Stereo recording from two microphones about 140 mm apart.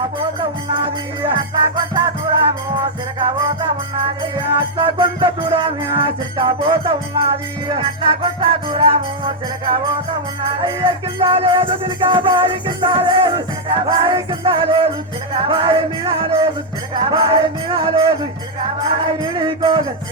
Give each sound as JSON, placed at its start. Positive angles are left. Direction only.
{"t": 0.3, "sound": "music", "side_deg": -35}
{"t": 3.2, "sound": "music", "side_deg": -30}